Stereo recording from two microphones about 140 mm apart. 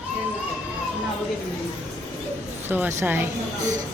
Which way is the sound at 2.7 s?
15° right (ahead or behind).